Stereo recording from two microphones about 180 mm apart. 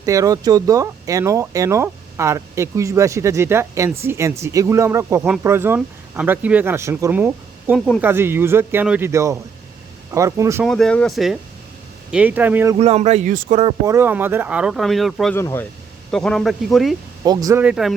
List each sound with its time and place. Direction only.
0.0 s speech: 20° right (ahead or behind)
10.6 s speech: centre (ahead or behind)
12.7 s speech: 35° right (ahead or behind)
13.8 s speech: 15° right (ahead or behind)
15.4 s speech: 15° left (ahead or behind)
16.1 s speech: centre (ahead or behind)
17.2 s speech: 20° right (ahead or behind)
17.6 s speech: 5° right (ahead or behind)